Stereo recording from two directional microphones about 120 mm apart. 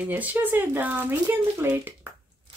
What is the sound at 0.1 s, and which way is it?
Speech, 15° right (ahead or behind).